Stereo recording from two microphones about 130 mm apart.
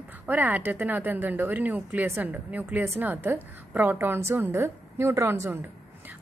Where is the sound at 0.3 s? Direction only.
15° right (ahead or behind).